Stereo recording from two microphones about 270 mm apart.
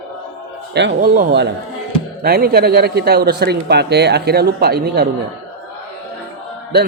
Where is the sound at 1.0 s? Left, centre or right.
Right.